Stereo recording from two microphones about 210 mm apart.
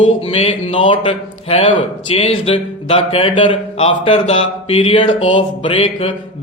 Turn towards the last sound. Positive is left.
turn(degrees=25)  # may be behind; listen again after turning